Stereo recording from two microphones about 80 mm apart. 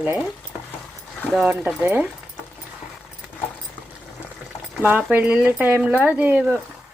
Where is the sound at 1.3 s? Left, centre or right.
Centre.